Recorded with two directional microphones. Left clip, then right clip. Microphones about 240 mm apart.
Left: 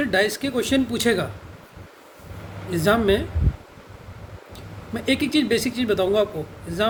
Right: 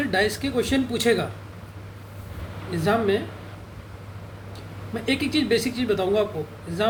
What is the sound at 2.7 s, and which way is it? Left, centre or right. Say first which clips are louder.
Speech: left 3 dB; left.